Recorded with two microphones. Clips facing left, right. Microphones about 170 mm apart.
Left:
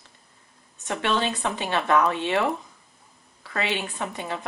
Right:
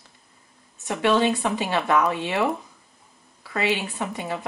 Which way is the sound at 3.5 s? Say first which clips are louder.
Right 3 dB; 20° right (ahead or behind).